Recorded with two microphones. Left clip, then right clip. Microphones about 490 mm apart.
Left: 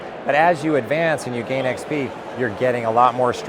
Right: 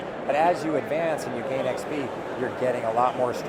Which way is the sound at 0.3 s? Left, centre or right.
Left.